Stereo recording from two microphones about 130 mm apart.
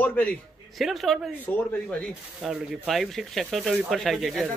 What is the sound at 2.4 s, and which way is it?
Speech, centre (ahead or behind).